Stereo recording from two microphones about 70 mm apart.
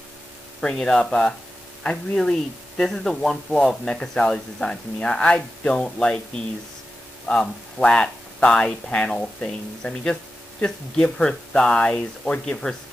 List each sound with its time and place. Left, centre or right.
0.6 s speech: centre
2.8 s speech: centre